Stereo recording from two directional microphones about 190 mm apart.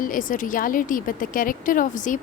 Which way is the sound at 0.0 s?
45° left (ahead or behind).